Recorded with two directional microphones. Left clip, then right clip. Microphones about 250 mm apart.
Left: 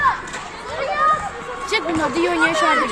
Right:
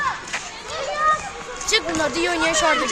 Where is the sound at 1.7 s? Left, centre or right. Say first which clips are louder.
Left 1 dB; right.